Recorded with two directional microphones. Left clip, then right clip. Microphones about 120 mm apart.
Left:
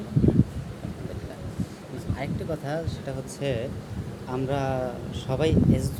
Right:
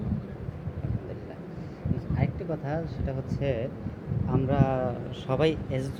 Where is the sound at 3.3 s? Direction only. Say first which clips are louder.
Left 1 dB; 20° left (ahead or behind).